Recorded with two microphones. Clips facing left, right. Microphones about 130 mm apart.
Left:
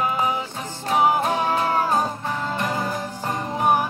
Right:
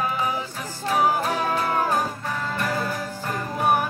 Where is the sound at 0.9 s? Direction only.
25° left (ahead or behind).